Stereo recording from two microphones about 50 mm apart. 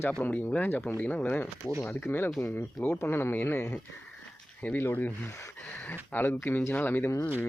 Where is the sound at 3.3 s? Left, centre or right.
Left.